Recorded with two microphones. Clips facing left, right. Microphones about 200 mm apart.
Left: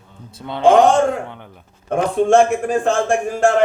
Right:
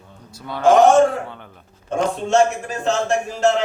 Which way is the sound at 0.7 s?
60° left (ahead or behind).